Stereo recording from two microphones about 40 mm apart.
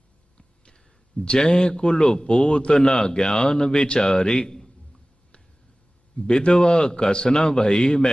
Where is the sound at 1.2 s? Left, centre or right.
Left.